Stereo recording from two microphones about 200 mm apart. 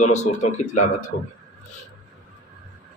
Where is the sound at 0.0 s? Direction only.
35° left (ahead or behind).